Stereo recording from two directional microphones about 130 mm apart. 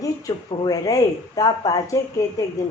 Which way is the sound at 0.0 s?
25° left (ahead or behind).